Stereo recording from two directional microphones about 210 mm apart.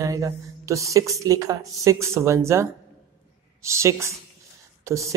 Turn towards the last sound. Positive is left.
turn(degrees=-15)  # may be behind; listen again after turning